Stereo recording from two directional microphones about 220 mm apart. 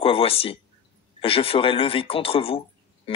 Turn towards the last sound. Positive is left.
turn(degrees=25)  # may be behind; listen again after turning